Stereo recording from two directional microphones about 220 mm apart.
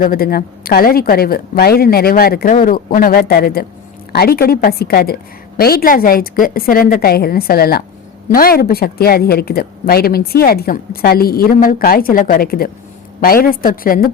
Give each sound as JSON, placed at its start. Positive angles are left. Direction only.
{"t": 0.0, "sound": "a woman's voice", "side_deg": 40}